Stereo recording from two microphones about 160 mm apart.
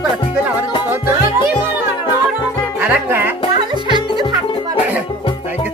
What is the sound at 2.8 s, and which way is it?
Music, 10° right (ahead or behind).